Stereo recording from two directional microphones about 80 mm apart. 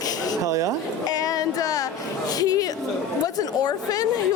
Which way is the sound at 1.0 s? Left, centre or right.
Left.